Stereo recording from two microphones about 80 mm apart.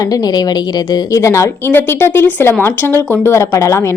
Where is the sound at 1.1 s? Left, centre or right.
Left.